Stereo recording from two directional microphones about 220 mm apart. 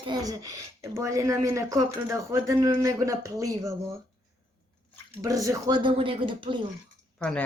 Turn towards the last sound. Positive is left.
turn(degrees=5)  # may be behind; listen again after turning